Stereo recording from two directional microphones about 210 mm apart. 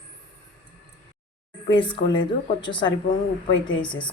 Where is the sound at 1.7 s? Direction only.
20° left (ahead or behind).